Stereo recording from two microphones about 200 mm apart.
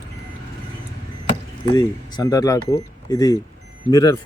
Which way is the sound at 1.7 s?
20° left (ahead or behind).